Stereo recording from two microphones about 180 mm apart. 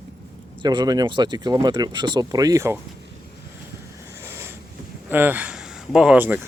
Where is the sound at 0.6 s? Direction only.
25° right (ahead or behind).